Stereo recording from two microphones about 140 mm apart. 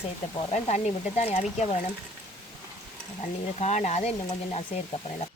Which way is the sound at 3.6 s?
55° left (ahead or behind).